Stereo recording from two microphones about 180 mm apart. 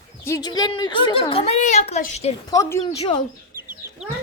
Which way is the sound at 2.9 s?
35° left (ahead or behind).